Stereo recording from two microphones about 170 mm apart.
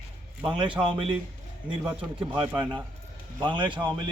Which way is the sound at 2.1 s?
30° right (ahead or behind).